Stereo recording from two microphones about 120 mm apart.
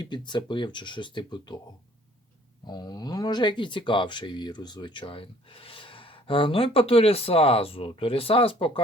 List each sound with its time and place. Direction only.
0.0 s speech: 40° left (ahead or behind)
2.6 s speech: 35° left (ahead or behind)